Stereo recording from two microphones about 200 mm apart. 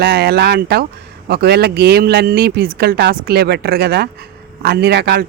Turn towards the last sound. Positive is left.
turn(degrees=-55)  # may be behind; listen again after turning